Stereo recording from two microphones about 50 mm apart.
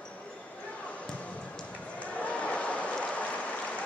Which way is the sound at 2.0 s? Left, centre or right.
Left.